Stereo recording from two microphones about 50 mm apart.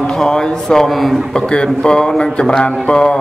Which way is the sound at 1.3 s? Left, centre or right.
Centre.